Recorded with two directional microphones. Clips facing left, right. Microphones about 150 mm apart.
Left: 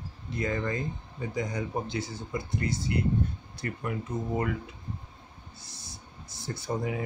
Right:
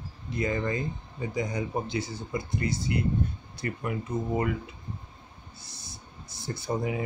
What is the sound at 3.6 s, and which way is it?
Speech, 15° right (ahead or behind).